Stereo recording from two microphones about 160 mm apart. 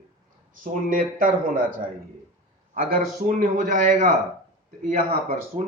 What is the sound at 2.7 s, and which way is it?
Speech, 65° right (ahead or behind).